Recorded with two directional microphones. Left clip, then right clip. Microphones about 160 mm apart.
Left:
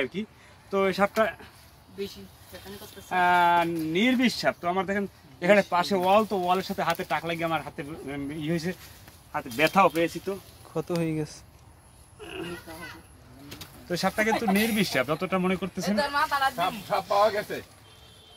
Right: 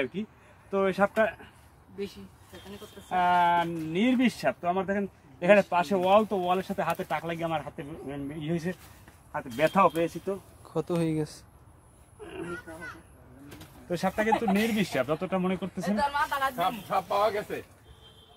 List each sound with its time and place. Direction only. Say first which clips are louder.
0.7 s speech: left 1 dB; 30° right (ahead or behind)
3.1 s speech: left 2 dB; 20° right (ahead or behind)
6.0 s speech: even; 20° right (ahead or behind)
13.8 s speech: left 2 dB; 20° right (ahead or behind)
14.3 s speech: even; 25° left (ahead or behind)
14.6 s speech: left 2 dB; 15° right (ahead or behind)
16.0 s speech: left 3 dB; 35° left (ahead or behind)
16.5 s speech: left 1 dB; 60° left (ahead or behind)